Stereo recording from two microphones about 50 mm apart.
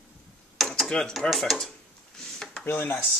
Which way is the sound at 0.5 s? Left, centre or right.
Centre.